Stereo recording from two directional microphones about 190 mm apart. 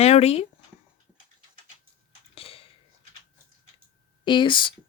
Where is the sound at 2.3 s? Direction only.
30° left (ahead or behind).